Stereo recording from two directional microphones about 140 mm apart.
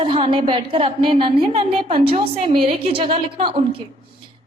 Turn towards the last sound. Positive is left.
turn(degrees=-45)  # may be behind; listen again after turning